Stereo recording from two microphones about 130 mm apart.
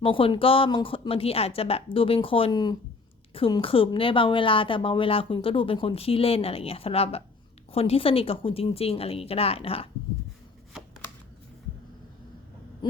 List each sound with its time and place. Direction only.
0.0 s speech: 45° left (ahead or behind)
2.5 s speech: 30° left (ahead or behind)
3.6 s speech: 45° left (ahead or behind)
12.8 s owl: 35° left (ahead or behind)